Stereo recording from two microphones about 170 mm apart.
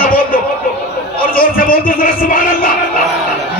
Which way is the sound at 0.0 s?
55° left (ahead or behind).